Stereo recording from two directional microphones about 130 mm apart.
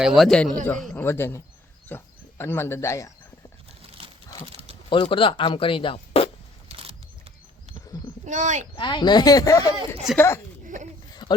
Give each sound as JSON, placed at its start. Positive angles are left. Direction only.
{"t": 0.0, "sound": "a man's voice", "side_deg": 0}
{"t": 0.9, "sound": "speech", "side_deg": 20}
{"t": 4.9, "sound": "speech", "side_deg": 40}
{"t": 6.7, "sound": "a sound", "side_deg": -50}
{"t": 8.2, "sound": "speech", "side_deg": -70}
{"t": 8.7, "sound": "speech", "side_deg": 40}
{"t": 11.1, "sound": "a sound", "side_deg": 35}